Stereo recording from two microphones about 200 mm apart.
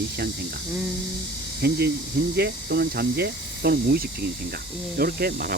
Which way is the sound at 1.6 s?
55° right (ahead or behind).